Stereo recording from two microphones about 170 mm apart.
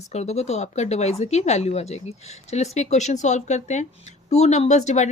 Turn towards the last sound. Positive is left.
turn(degrees=45)  # may be behind; listen again after turning